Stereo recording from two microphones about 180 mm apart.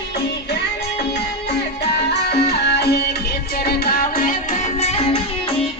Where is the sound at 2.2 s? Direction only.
65° left (ahead or behind); by 5.2 s 35° left (ahead or behind).